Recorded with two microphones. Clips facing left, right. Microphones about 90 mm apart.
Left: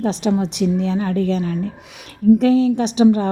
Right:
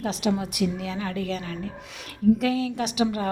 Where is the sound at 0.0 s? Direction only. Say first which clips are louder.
Left 7 dB; 35° left (ahead or behind).